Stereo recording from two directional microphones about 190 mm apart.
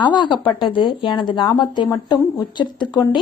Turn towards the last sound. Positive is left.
turn(degrees=25)  # may be behind; listen again after turning